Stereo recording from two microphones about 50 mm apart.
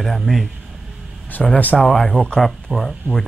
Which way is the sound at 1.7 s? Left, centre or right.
Centre.